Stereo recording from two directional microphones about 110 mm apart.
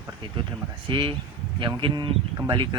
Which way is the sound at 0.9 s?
50° right (ahead or behind).